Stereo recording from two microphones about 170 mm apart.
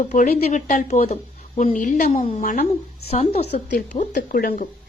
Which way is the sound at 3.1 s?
35° left (ahead or behind).